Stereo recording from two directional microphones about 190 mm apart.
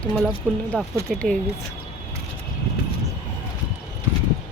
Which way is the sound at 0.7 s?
5° left (ahead or behind).